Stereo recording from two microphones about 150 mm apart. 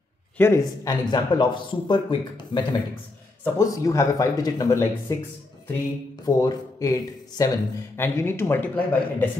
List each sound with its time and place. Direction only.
0.4 s speech: 15° left (ahead or behind)
1.1 s a man's voice: 30° left (ahead or behind)
3.5 s speech: 20° left (ahead or behind)
6.2 s speech: 25° left (ahead or behind)